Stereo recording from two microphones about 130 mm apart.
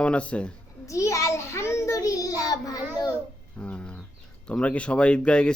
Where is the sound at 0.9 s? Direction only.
25° left (ahead or behind).